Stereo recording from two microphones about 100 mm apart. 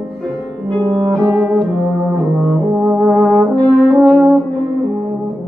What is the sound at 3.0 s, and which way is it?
Brass instrument, centre (ahead or behind).